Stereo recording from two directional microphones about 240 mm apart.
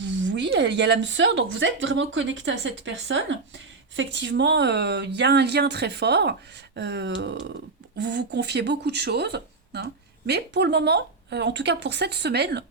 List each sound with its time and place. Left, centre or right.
0.0 s speech: right